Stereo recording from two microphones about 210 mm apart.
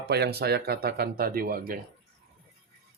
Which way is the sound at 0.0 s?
50° right (ahead or behind).